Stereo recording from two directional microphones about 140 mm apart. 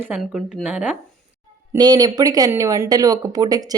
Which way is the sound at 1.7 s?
30° right (ahead or behind).